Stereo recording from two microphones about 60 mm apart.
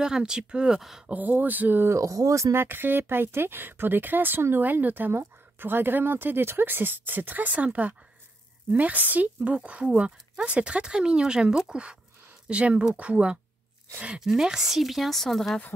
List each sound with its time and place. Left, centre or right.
0.0 s speech: centre
1.0 s speech: right
1.9 s speech: right
2.5 s speech: right; by 14.2 s centre
14.2 s speech: centre